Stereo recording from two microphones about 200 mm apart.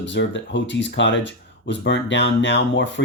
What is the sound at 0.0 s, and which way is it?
Speech, 60° left (ahead or behind).